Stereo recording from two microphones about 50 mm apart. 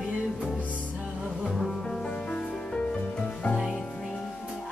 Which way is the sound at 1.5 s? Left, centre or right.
Centre.